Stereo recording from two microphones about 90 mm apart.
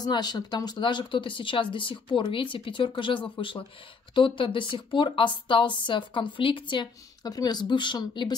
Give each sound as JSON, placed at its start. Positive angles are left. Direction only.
{"t": 0.0, "sound": "speech", "side_deg": 50}
{"t": 7.3, "sound": "speech", "side_deg": 50}